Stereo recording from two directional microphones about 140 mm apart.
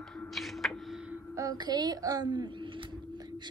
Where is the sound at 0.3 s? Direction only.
Centre (ahead or behind).